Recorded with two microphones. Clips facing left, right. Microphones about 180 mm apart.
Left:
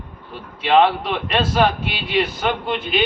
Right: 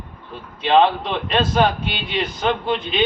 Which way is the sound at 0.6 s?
5° left (ahead or behind).